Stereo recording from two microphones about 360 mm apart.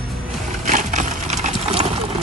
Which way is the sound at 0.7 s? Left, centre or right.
Right.